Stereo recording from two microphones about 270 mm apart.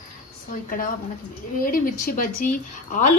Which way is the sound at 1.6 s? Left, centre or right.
Left.